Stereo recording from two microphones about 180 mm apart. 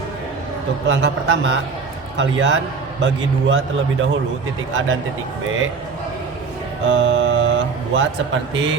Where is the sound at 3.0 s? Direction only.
90° right.